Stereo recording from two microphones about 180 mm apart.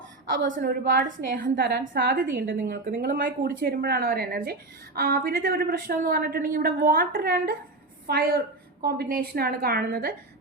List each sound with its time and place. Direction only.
0.5 s a woman's voice: 50° right (ahead or behind)
1.8 s a woman's voice: 50° right (ahead or behind)